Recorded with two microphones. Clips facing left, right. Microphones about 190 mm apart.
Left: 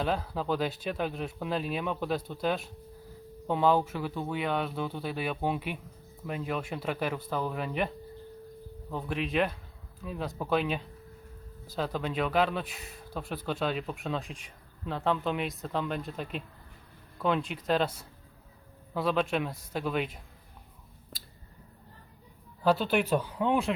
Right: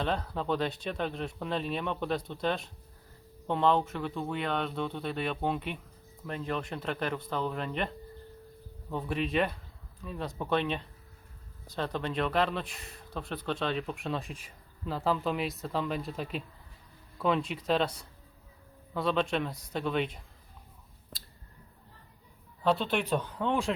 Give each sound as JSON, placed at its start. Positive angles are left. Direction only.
{"t": 0.0, "sound": "speech", "side_deg": 5}
{"t": 18.9, "sound": "speech", "side_deg": 5}
{"t": 22.6, "sound": "speech", "side_deg": 5}